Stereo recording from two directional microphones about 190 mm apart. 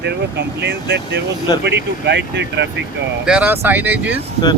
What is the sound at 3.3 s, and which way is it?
Speech, 10° right (ahead or behind).